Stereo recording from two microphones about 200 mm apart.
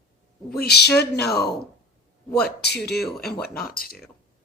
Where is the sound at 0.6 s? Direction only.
55° left (ahead or behind).